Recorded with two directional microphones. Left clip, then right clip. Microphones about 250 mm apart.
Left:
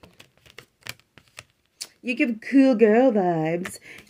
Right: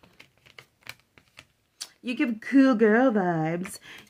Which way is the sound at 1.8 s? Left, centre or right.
Right.